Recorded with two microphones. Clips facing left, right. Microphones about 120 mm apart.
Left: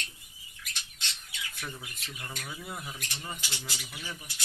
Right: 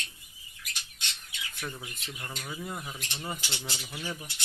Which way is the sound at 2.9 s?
25° right (ahead or behind).